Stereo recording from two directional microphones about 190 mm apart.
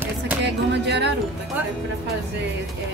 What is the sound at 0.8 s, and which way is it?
Music, 65° right (ahead or behind).